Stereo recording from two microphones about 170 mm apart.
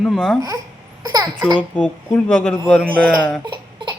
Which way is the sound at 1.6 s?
10° left (ahead or behind).